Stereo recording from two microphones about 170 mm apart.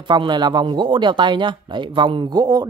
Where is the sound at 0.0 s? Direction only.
25° right (ahead or behind).